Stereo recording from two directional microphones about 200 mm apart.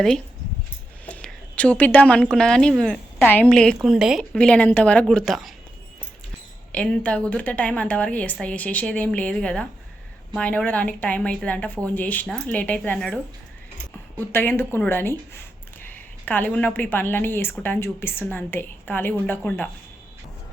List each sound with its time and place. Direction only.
1.0 s a sound: 5° left (ahead or behind)
2.3 s a woman's voice: 5° left (ahead or behind)
6.7 s a woman's voice: 5° left (ahead or behind)
14.2 s a woman's voice: 10° left (ahead or behind)